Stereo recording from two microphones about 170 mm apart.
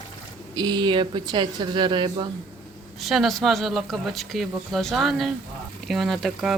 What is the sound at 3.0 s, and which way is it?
Speech, centre (ahead or behind).